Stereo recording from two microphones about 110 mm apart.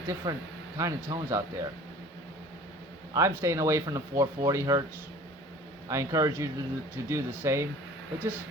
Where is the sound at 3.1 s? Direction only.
25° right (ahead or behind).